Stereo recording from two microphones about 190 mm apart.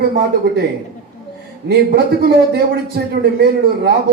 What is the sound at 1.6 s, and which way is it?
A man's voice, 60° right (ahead or behind).